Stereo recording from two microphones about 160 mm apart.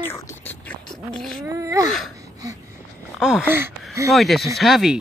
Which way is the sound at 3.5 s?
15° right (ahead or behind).